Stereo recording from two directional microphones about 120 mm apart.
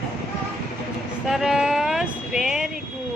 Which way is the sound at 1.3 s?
5° right (ahead or behind).